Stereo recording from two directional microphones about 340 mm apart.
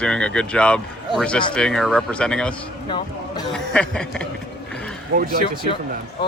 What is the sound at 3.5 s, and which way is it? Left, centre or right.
Speech, centre.